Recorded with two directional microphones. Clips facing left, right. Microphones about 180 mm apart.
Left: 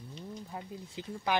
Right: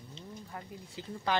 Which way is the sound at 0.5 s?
15° left (ahead or behind).